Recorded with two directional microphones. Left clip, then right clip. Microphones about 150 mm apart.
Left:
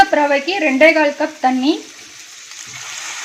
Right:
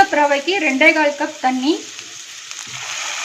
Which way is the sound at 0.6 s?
30° left (ahead or behind).